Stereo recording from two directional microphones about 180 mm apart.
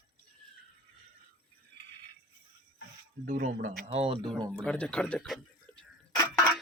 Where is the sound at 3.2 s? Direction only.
45° right (ahead or behind).